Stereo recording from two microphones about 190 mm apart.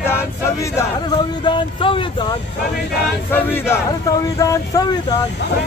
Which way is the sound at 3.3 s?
10° left (ahead or behind).